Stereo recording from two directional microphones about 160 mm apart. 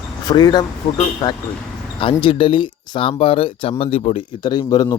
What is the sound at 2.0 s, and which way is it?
Speech, 35° left (ahead or behind).